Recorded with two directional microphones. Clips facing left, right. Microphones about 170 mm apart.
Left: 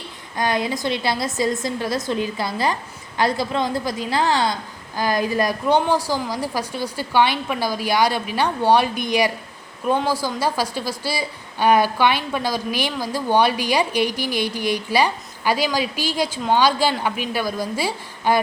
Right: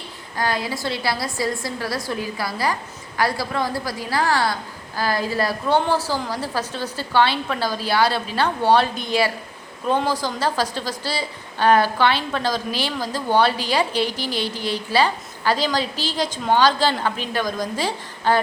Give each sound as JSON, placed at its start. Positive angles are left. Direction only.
{"t": 0.3, "sound": "a woman's voice", "side_deg": 20}